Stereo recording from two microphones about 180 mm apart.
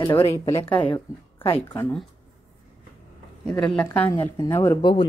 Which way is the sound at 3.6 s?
5° left (ahead or behind).